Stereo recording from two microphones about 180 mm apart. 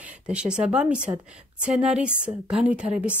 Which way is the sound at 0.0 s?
5° right (ahead or behind).